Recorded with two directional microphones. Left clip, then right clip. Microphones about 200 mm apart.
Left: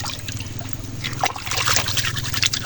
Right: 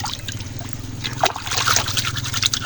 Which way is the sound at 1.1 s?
15° right (ahead or behind).